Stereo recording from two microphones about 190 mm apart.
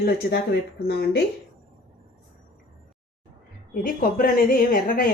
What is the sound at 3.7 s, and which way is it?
A woman's voice, 50° left (ahead or behind).